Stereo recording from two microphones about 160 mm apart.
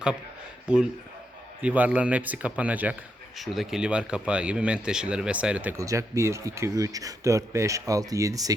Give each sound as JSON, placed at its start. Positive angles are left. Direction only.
{"t": 0.7, "sound": "speech", "side_deg": -5}
{"t": 5.8, "sound": "speech", "side_deg": -20}